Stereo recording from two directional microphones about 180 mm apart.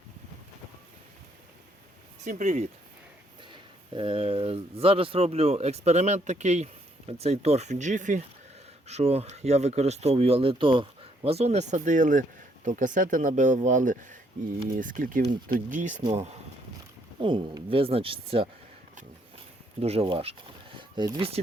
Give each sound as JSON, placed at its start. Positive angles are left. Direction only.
{"t": 2.2, "sound": "speech", "side_deg": -40}
{"t": 3.5, "sound": "speech", "side_deg": -30}
{"t": 17.2, "sound": "speech", "side_deg": -25}
{"t": 19.8, "sound": "speech", "side_deg": -35}